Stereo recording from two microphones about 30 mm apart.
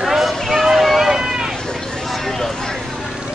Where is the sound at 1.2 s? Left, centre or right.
Right.